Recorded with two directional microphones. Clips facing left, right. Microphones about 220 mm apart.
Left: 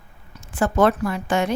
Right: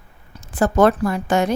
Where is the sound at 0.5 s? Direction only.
40° right (ahead or behind).